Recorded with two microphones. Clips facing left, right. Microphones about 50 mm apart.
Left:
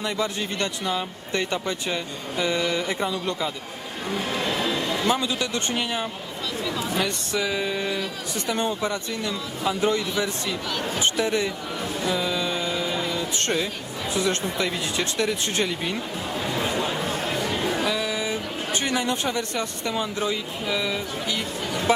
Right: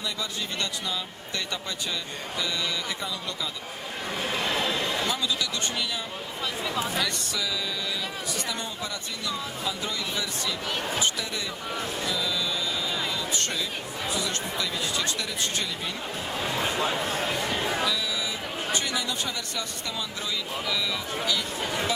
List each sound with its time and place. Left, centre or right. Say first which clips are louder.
0.0 s speech: left 6 dB; left
5.0 s speech: left 5 dB; left
6.6 s speech: left 1 dB; centre
6.9 s speech: left 4 dB; left
12.0 s a sound: left 6 dB; left
14.2 s speech: left 9 dB; left
16.6 s speech: left 1 dB; centre
17.8 s speech: left 4 dB; left